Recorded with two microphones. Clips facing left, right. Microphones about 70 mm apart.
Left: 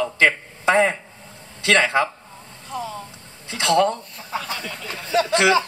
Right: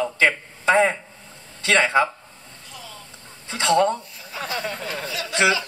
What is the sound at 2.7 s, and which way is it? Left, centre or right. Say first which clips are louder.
Speech: left 13 dB; left.